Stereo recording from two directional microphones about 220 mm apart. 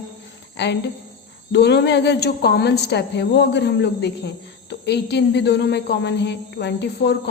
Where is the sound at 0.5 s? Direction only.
50° left (ahead or behind).